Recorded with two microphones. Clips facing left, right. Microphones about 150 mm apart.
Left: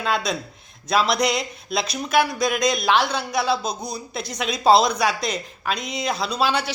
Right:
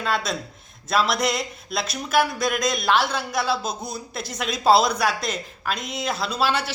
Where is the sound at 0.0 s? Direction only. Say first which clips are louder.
Left 2 dB; centre (ahead or behind).